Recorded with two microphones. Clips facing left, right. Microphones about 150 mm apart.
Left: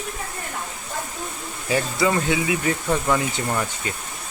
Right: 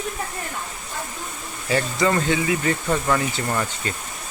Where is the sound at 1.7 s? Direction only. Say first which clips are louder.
Even; 10° left (ahead or behind).